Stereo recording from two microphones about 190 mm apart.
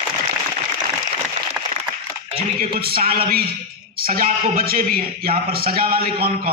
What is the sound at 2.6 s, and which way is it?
A man's voice, 55° right (ahead or behind).